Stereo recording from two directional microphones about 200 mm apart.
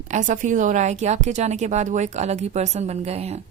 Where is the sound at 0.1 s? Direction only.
35° right (ahead or behind).